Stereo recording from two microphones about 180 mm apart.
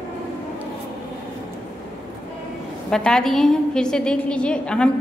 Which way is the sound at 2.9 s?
5° left (ahead or behind).